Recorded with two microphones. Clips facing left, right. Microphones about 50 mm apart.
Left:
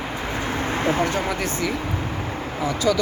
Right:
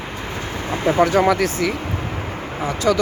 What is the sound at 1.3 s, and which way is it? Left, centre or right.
Speech, right.